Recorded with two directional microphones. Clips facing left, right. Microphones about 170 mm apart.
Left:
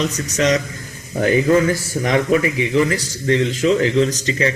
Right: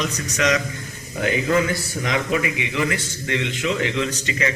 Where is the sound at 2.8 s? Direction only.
35° left (ahead or behind).